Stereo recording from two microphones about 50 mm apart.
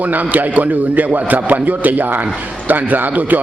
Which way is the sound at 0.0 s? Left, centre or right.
Right.